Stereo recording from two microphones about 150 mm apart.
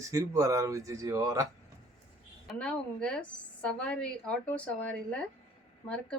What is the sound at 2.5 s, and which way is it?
A woman's voice, 5° left (ahead or behind).